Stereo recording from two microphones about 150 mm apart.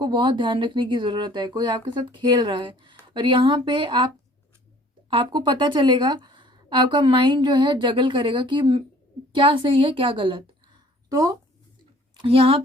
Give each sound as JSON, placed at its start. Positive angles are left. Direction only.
{"t": 0.0, "sound": "speech", "side_deg": -30}
{"t": 12.2, "sound": "speech", "side_deg": -40}